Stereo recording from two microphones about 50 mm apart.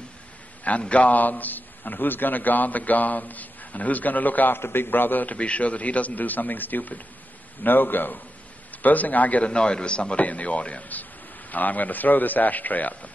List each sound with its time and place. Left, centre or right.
0.7 s a man's voice: left
4.6 s a man's voice: left
9.5 s a man's voice: centre